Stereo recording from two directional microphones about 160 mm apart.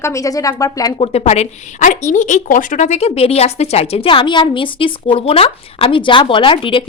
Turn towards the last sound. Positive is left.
turn(degrees=30)  # may be behind; listen again after turning